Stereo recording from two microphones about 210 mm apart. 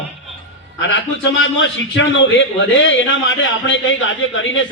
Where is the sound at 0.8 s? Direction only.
60° left (ahead or behind).